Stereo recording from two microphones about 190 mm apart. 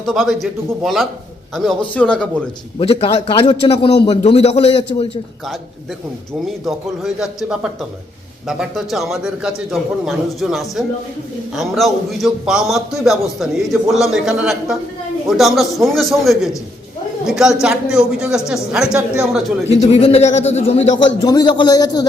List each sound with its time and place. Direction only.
0.0 s a man's voice: centre (ahead or behind)
2.7 s a man's voice: 30° left (ahead or behind)
6.4 s a man's voice: centre (ahead or behind)
19.7 s speech: 35° left (ahead or behind)
21.2 s a man's voice: 20° left (ahead or behind)